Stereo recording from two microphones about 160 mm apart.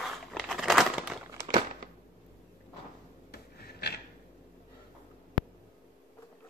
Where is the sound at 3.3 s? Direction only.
85° left.